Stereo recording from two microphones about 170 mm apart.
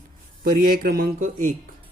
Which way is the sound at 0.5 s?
60° right (ahead or behind).